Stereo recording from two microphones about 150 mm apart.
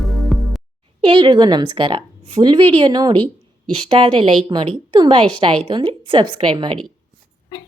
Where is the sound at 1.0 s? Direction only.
35° right (ahead or behind).